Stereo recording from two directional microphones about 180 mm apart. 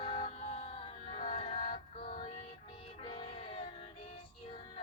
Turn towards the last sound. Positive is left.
turn(degrees=30)  # may be behind; listen again after turning